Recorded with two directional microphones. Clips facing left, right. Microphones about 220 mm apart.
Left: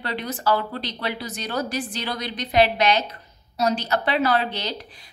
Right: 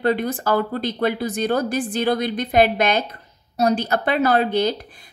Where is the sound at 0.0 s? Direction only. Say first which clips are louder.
Right 6 dB; 50° right (ahead or behind).